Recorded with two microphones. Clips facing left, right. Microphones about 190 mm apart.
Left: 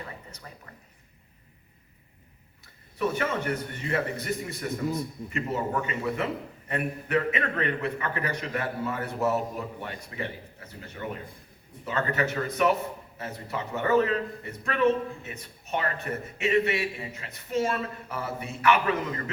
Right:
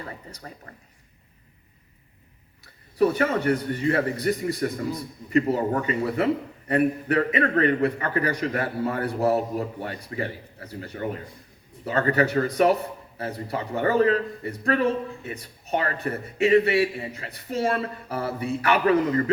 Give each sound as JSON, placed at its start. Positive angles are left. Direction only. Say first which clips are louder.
{"t": 0.3, "sound": "a man's voice", "louder": "right 5 dB", "side_deg": -35}
{"t": 3.0, "sound": "a man's voice", "louder": "right 7 dB", "side_deg": -35}